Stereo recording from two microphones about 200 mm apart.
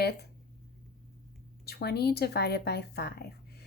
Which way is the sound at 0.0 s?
55° left (ahead or behind).